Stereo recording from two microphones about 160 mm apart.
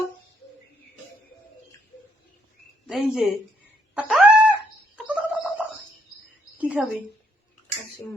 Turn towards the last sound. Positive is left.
turn(degrees=-10)  # may be behind; listen again after turning